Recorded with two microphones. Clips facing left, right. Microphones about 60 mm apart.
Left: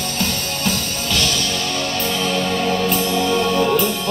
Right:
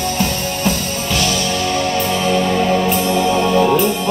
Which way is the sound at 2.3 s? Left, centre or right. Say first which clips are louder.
Right 6 dB; right.